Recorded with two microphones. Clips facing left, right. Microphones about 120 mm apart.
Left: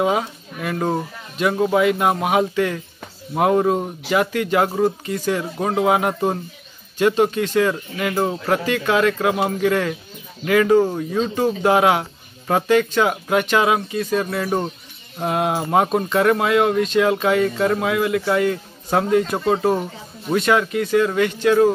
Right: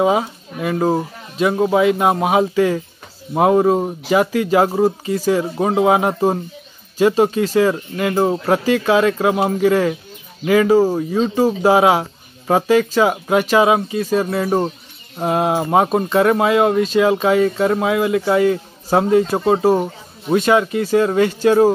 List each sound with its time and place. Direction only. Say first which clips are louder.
0.0 s speech: right 4 dB; 15° right (ahead or behind)
2.3 s speech: right 4 dB; 10° right (ahead or behind)
4.5 s speech: right 4 dB; 30° right (ahead or behind)
4.8 s speech: right 4 dB; 5° right (ahead or behind)
5.4 s speech: right 4 dB; 20° right (ahead or behind)
7.0 s speech: right 3 dB; 5° right (ahead or behind)
8.3 s speech: right 4 dB; 30° right (ahead or behind)
9.4 s speech: right 4 dB; 10° right (ahead or behind)
13.6 s speech: right 4 dB; 15° right (ahead or behind); by 21.7 s 35° right (ahead or behind)